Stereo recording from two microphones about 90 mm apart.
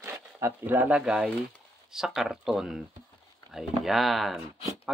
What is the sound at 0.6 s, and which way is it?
Speech, 20° right (ahead or behind).